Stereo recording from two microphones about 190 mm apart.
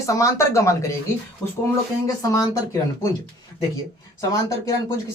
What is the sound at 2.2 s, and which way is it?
Speech, 15° left (ahead or behind).